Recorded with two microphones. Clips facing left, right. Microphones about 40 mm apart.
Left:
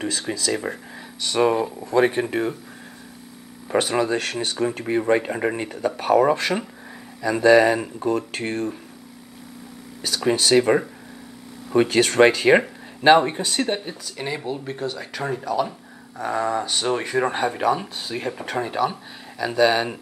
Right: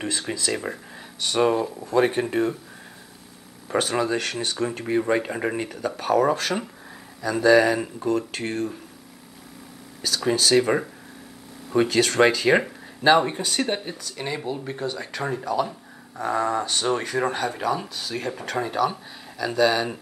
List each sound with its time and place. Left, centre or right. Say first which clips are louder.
0.3 s speech: left 3 dB; centre
0.6 s speech: left 2 dB; centre
3.6 s speech: left 2 dB; centre
6.3 s speech: left 2 dB; left
10.0 s speech: left 2 dB; centre
11.9 s speech: left 3 dB; left
13.4 s speech: left 1 dB; centre
17.3 s speech: left 4 dB; left
18.1 s speech: left 1 dB; centre